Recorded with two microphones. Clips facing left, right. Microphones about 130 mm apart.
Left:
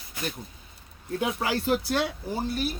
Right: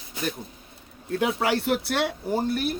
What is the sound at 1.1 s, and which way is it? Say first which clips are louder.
Speech: right 4 dB; 70° right (ahead or behind).